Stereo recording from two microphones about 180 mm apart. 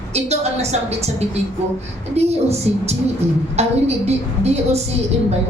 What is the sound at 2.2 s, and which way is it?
A woman's voice, 35° right (ahead or behind).